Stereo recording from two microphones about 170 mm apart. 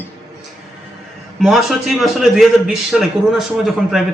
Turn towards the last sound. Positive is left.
turn(degrees=0)  # may be behind; listen again after turning